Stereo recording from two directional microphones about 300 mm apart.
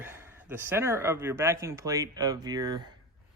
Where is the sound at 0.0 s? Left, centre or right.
Centre.